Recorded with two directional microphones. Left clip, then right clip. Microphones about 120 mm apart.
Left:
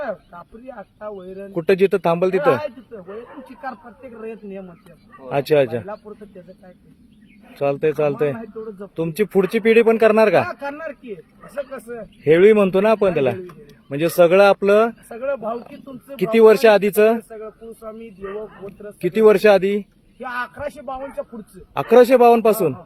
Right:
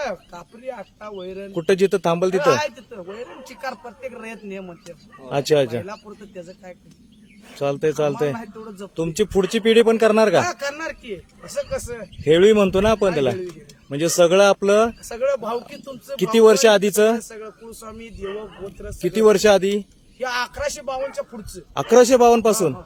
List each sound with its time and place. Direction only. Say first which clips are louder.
0.7 s speech: right 1 dB; 50° right (ahead or behind)
1.5 s speech: left 2 dB; centre (ahead or behind)
2.4 s speech: even; 45° right (ahead or behind)
3.1 s speech: even; 5° right (ahead or behind)
4.2 s speech: left 1 dB; 50° right (ahead or behind)
5.2 s speech: left 2 dB; centre (ahead or behind)
7.5 s speech: left 2 dB; 5° right (ahead or behind)
10.6 s speech: right 1 dB; 50° right (ahead or behind)
12.2 s speech: left 2 dB; centre (ahead or behind)
16.1 s speech: left 1 dB; 5° right (ahead or behind)
18.2 s speech: right 1 dB; 15° right (ahead or behind)
20.2 s a man's voice: right 3 dB; 45° right (ahead or behind)
21.8 s speech: left 2 dB; centre (ahead or behind)